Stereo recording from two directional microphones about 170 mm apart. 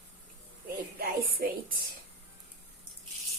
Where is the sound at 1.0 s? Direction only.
60° right (ahead or behind).